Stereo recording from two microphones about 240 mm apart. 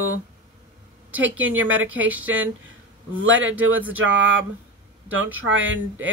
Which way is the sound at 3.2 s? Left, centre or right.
Right.